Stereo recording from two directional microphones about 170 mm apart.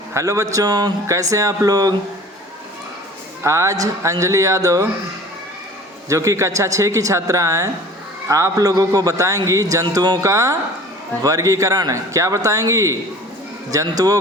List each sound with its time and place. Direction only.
0.1 s speech: 15° right (ahead or behind)
3.4 s speech: 20° right (ahead or behind)
6.1 s speech: 20° right (ahead or behind)